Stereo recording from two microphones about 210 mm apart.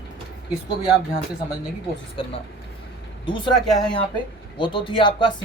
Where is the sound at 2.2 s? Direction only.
25° left (ahead or behind).